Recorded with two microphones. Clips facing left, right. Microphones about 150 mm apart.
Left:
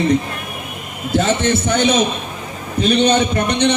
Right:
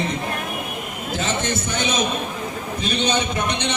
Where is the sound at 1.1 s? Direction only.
60° left (ahead or behind).